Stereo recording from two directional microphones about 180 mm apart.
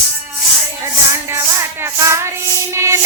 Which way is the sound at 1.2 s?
15° right (ahead or behind).